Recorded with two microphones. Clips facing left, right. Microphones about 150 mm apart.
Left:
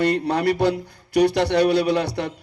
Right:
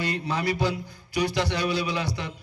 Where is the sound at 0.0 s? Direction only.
65° left (ahead or behind).